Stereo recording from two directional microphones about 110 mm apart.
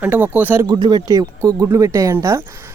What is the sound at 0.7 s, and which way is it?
Speech, 45° right (ahead or behind).